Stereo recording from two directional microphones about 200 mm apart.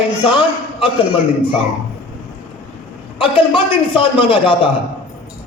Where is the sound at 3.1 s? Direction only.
25° left (ahead or behind).